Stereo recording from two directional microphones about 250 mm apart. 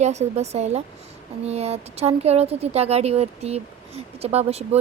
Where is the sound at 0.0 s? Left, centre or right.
Right.